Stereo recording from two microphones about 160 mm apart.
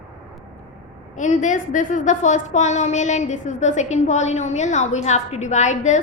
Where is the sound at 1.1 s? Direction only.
50° left (ahead or behind).